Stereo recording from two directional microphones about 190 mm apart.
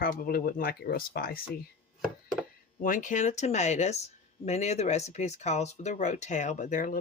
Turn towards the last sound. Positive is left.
turn(degrees=45)  # may be behind; listen again after turning